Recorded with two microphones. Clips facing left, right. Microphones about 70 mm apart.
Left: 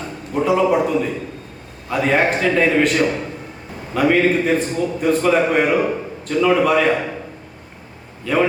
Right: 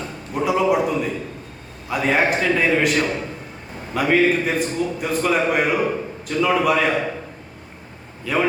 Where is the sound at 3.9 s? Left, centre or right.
Centre.